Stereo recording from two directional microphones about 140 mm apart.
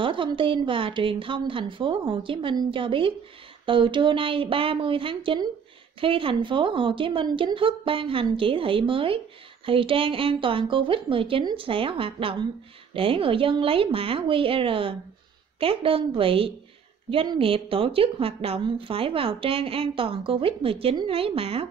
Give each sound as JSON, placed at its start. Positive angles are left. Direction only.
{"t": 0.0, "sound": "a woman's voice", "side_deg": -35}